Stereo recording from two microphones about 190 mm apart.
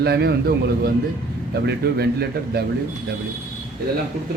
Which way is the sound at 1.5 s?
60° right (ahead or behind).